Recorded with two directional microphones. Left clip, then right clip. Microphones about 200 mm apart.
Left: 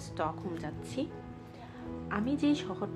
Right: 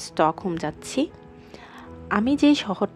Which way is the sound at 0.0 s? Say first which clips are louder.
Right 13 dB; 45° right (ahead or behind).